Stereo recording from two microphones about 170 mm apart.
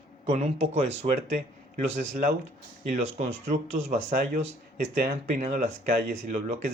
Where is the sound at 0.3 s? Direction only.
40° right (ahead or behind).